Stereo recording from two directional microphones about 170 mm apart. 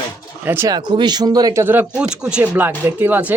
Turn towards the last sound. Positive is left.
turn(degrees=-10)  # may be behind; listen again after turning